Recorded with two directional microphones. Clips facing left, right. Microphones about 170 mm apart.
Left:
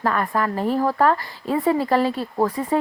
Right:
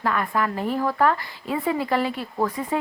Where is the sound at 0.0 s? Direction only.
40° left (ahead or behind).